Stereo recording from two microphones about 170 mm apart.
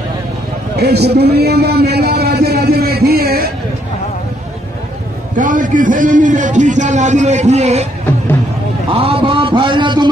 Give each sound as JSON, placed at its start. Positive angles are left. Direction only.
{"t": 0.7, "sound": "a sound", "side_deg": -75}
{"t": 5.4, "sound": "a man's voice", "side_deg": -50}
{"t": 8.9, "sound": "a man's voice", "side_deg": -35}